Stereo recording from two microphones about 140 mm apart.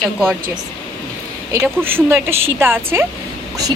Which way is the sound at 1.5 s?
15° right (ahead or behind).